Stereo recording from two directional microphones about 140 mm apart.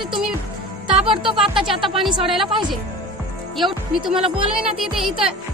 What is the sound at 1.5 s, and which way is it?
Speech, centre (ahead or behind).